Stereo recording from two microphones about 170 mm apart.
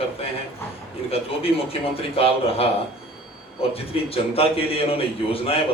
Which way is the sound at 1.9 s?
35° left (ahead or behind).